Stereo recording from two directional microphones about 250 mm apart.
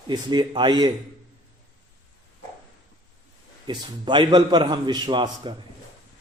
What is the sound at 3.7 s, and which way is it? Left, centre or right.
A man's voice, centre.